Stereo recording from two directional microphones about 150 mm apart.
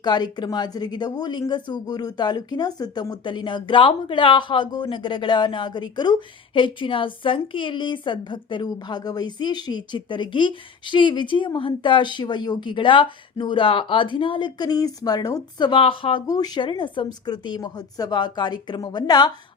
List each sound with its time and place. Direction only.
0.0 s a woman's voice: 30° left (ahead or behind)
16.2 s a woman's voice: 25° left (ahead or behind)